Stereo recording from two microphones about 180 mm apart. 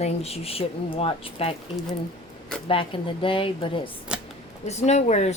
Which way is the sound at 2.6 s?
30° left (ahead or behind).